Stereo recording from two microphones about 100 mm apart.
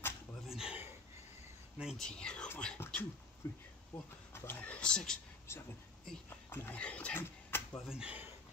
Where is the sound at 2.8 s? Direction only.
20° left (ahead or behind); by 5.2 s 5° left (ahead or behind).